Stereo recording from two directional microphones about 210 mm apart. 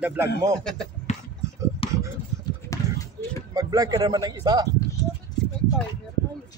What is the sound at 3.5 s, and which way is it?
Speech, 15° right (ahead or behind).